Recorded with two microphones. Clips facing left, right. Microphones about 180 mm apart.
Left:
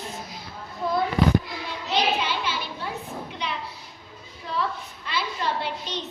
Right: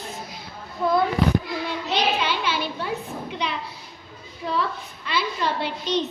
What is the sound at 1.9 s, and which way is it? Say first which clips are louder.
Speech: even; 70° right (ahead or behind).